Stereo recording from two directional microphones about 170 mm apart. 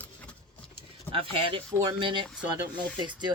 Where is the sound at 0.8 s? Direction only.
30° right (ahead or behind).